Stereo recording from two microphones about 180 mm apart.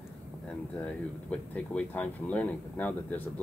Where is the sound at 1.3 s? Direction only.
5° left (ahead or behind).